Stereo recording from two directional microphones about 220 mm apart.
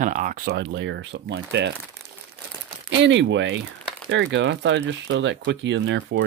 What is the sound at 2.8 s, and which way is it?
Speech, 55° right (ahead or behind).